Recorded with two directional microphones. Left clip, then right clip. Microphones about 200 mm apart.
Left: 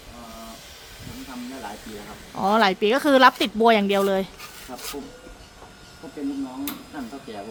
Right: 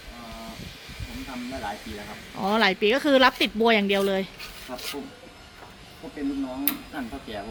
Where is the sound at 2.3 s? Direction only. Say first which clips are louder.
Left 3 dB; 15° left (ahead or behind).